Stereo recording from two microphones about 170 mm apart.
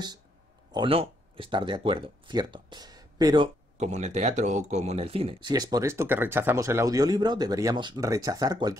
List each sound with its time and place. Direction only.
0.7 s speech: 30° right (ahead or behind)
3.7 s speech: 40° right (ahead or behind)
5.5 s speech: 20° right (ahead or behind)